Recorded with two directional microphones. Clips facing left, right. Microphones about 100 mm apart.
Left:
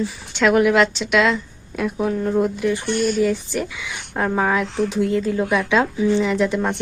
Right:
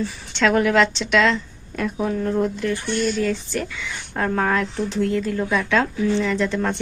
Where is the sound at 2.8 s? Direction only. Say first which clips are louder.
Left 2 dB; 50° left (ahead or behind).